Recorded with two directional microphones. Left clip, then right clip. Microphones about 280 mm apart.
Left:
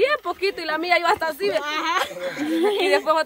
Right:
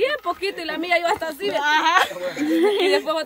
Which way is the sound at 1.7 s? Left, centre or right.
Centre.